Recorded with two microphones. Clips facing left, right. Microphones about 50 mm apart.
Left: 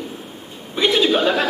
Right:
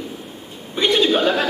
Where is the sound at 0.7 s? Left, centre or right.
Centre.